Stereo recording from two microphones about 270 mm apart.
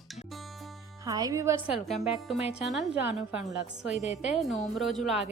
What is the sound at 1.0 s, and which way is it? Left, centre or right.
A woman's voice, centre.